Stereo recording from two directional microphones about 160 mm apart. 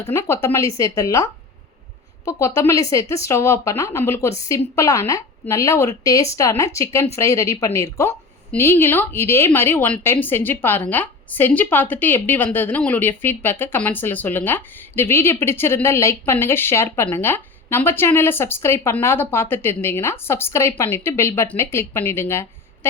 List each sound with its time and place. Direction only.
0.1 s a woman's voice: 15° left (ahead or behind)
2.6 s a woman's voice: 20° left (ahead or behind)